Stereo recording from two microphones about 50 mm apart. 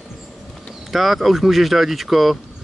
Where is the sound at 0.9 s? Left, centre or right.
Centre.